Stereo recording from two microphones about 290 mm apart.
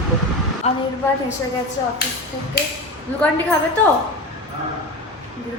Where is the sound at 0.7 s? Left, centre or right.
Left.